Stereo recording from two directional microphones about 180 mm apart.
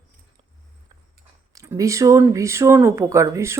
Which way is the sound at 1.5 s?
15° right (ahead or behind).